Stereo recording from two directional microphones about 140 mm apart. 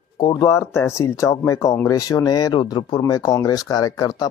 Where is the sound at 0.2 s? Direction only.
25° left (ahead or behind).